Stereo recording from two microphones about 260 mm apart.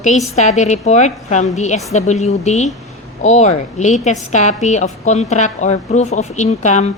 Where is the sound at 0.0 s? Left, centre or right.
Left.